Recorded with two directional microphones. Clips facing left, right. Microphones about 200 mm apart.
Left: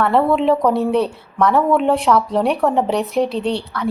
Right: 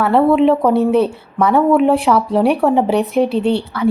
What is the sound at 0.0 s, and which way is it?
A woman's voice, centre (ahead or behind).